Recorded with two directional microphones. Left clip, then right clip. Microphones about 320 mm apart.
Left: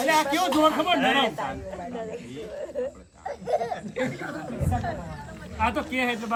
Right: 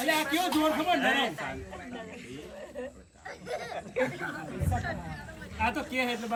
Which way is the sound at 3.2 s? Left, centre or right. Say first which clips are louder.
Left 10 dB; left.